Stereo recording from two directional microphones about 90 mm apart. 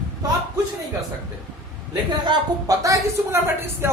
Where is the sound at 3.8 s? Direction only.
30° right (ahead or behind).